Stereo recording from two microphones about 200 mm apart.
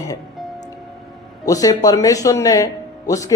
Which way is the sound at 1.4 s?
15° left (ahead or behind).